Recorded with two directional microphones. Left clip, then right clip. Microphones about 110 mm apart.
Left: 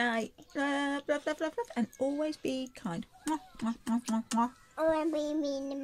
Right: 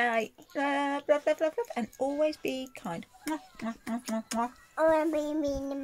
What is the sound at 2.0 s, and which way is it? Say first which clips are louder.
Speech: right 5 dB; 30° left (ahead or behind).